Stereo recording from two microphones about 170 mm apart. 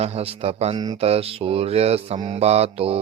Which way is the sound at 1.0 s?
35° right (ahead or behind).